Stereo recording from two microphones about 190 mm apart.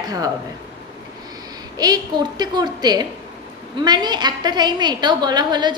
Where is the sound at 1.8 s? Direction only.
20° right (ahead or behind).